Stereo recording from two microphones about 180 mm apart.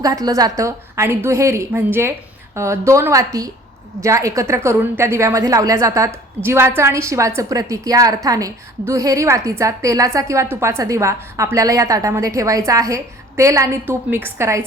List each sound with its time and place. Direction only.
0.0 s a woman's voice: 20° right (ahead or behind)